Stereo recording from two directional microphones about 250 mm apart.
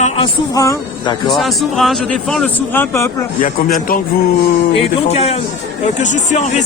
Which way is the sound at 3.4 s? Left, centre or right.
Left.